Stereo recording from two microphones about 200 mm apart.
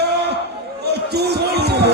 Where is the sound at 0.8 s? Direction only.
55° right (ahead or behind).